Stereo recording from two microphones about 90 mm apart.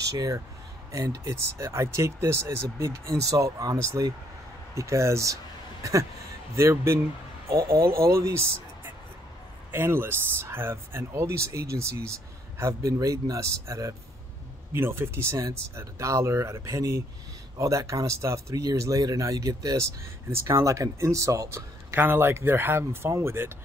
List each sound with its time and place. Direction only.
0.1 s speech: 40° right (ahead or behind)
9.7 s speech: 25° right (ahead or behind)